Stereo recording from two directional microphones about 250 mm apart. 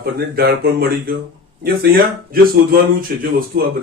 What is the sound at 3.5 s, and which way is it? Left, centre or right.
Speech, right.